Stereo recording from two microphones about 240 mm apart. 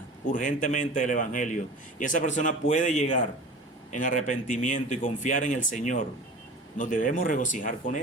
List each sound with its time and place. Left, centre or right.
0.3 s a man's voice: left